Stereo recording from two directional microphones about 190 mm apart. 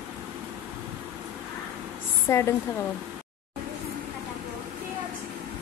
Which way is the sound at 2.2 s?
15° left (ahead or behind).